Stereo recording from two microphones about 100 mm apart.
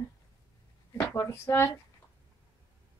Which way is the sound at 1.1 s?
25° left (ahead or behind).